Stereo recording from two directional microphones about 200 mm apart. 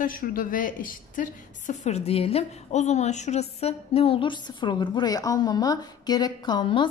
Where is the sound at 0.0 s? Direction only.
45° left (ahead or behind).